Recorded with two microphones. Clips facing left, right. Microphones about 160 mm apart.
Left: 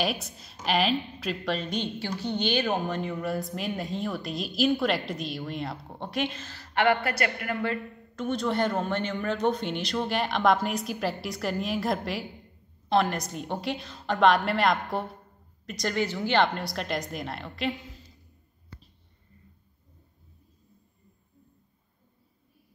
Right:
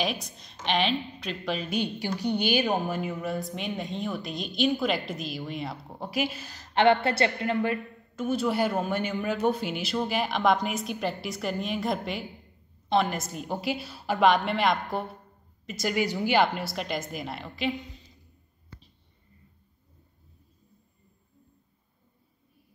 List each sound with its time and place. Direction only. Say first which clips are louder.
0.0 s a woman's voice: left 1 dB; 5° left (ahead or behind); by 7.8 s 20° right (ahead or behind)
8.2 s a woman's voice: right 1 dB; 5° right (ahead or behind)